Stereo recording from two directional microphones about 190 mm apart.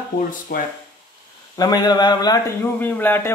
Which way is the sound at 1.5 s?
20° left (ahead or behind).